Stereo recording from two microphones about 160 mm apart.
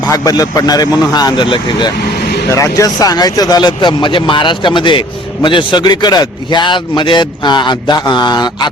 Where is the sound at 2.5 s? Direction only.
20° left (ahead or behind).